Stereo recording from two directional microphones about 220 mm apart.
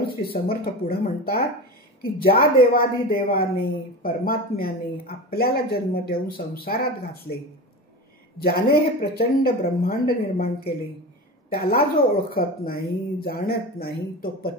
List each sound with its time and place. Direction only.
0.5 s a woman's voice: 45° left (ahead or behind)
8.4 s a woman's voice: 45° left (ahead or behind)